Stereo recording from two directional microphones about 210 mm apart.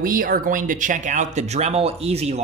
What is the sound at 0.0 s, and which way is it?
Speech, 40° right (ahead or behind).